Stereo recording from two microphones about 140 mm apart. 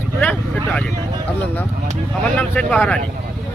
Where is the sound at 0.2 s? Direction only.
10° left (ahead or behind).